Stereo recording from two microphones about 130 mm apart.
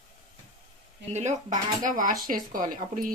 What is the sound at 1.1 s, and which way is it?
Speech, 70° right (ahead or behind).